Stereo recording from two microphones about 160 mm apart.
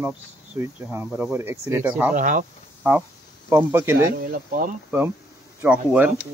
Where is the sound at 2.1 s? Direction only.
55° right (ahead or behind).